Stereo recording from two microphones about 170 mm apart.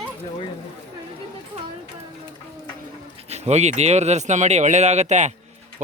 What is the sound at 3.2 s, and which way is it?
A man's voice, 40° right (ahead or behind).